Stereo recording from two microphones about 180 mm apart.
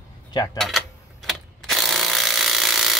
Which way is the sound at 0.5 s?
Centre (ahead or behind).